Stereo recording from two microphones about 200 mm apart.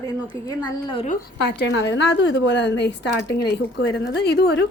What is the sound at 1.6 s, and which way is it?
A woman's voice, 60° left (ahead or behind).